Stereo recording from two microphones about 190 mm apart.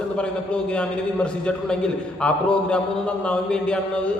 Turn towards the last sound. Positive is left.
turn(degrees=5)  # may be behind; listen again after turning